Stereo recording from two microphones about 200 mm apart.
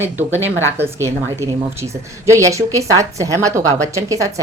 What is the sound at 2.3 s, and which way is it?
Speech, 15° right (ahead or behind).